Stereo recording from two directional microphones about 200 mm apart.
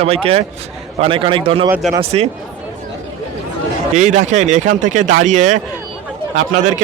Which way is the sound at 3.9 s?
40° right (ahead or behind).